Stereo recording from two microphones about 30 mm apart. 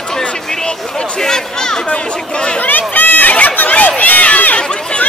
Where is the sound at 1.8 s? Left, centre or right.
Left.